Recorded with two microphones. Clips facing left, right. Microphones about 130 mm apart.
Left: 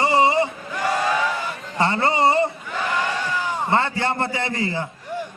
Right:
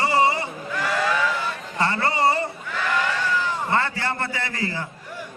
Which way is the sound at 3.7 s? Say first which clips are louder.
Left 5 dB; 20° left (ahead or behind).